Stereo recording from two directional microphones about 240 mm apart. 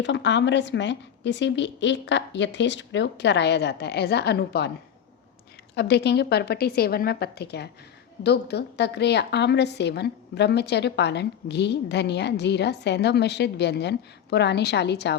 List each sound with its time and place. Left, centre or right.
0.0 s a woman's voice: left
5.7 s a woman's voice: left